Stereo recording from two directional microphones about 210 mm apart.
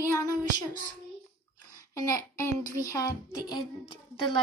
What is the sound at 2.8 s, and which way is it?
A woman's voice, 20° left (ahead or behind).